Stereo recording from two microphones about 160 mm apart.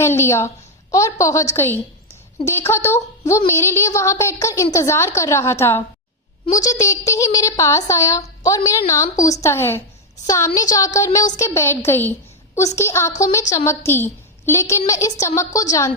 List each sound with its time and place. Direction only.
0.0 s a woman's voice: 15° left (ahead or behind)